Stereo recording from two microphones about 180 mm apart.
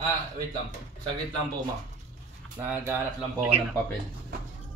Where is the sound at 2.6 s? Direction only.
10° right (ahead or behind).